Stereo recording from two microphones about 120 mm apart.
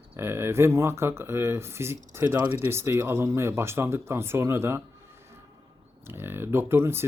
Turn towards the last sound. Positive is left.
turn(degrees=-20)  # may be behind; listen again after turning